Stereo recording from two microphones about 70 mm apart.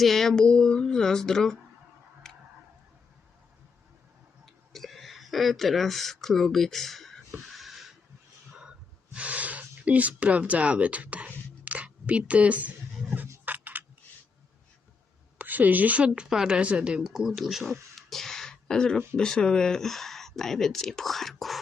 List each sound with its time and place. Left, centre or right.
0.0 s a woman's voice: centre
2.3 s tick-tock: centre
4.4 s a sound: centre
9.1 s speech: right
13.4 s a sound: right
15.4 s a woman's voice: right; by 21.6 s centre